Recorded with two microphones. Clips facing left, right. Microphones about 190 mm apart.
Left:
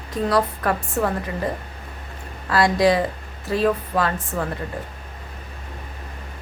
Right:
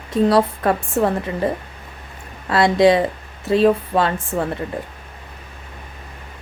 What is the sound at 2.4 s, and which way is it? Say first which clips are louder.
Speech: right 4 dB; 25° right (ahead or behind).